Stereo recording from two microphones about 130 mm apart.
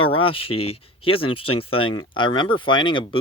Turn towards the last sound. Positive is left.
turn(degrees=40)  # may be behind; listen again after turning